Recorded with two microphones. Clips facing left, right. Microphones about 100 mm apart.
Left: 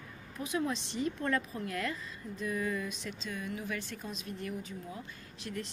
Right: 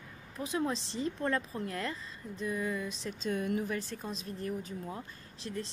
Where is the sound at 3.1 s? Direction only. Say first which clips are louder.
Right 7 dB; 50° right (ahead or behind).